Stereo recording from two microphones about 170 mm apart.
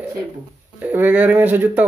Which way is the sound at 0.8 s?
10° right (ahead or behind).